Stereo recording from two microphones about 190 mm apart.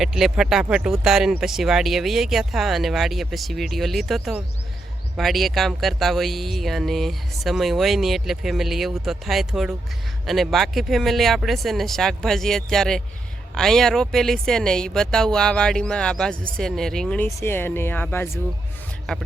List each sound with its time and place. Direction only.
0.0 s speech: centre (ahead or behind)